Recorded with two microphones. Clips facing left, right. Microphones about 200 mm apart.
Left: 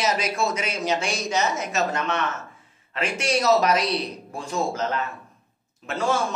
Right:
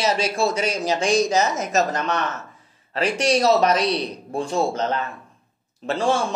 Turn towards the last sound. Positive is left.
turn(degrees=-30)  # may be behind; listen again after turning